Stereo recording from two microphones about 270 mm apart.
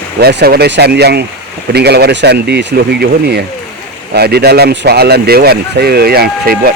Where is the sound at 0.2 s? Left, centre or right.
Right.